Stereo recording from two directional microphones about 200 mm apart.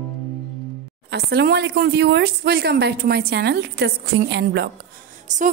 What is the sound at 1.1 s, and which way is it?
Speech, 55° right (ahead or behind).